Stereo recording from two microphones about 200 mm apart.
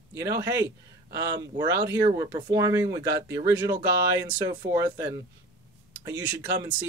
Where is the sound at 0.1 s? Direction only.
15° right (ahead or behind).